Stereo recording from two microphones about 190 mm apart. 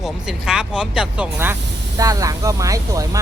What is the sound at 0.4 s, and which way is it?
Speech, 5° right (ahead or behind).